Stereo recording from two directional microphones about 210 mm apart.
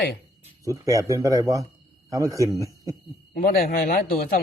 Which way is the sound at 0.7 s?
15° right (ahead or behind).